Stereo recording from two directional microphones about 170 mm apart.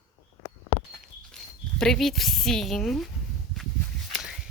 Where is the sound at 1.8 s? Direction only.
Centre (ahead or behind).